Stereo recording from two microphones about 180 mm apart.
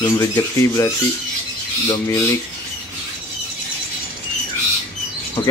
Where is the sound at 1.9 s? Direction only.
20° left (ahead or behind).